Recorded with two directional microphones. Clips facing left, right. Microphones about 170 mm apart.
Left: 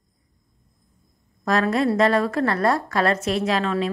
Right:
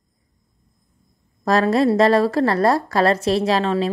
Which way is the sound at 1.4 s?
35° right (ahead or behind).